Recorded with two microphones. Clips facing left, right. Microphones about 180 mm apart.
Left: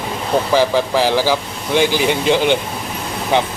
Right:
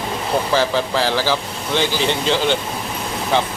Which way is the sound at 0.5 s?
15° left (ahead or behind).